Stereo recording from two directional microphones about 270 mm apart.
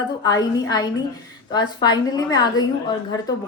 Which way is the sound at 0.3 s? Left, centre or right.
Centre.